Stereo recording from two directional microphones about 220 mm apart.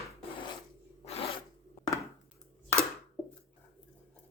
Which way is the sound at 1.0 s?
25° left (ahead or behind).